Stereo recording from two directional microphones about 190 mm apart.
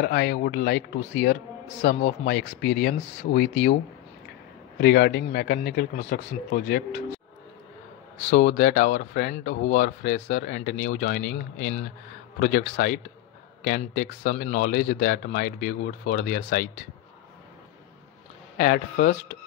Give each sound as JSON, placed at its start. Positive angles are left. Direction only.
{"t": 0.0, "sound": "speech", "side_deg": 55}
{"t": 4.7, "sound": "a man's voice", "side_deg": 55}
{"t": 8.2, "sound": "speech", "side_deg": 40}
{"t": 18.6, "sound": "speech", "side_deg": 40}